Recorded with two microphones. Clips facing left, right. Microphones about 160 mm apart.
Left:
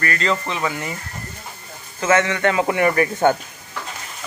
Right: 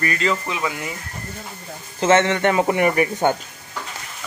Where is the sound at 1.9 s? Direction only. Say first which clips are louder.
Right 2 dB; 25° right (ahead or behind).